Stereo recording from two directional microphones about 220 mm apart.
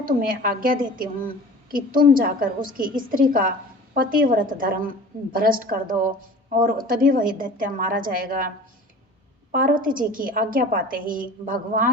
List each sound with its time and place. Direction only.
0.0 s a woman's voice: 40° right (ahead or behind)
9.5 s a woman's voice: 40° right (ahead or behind)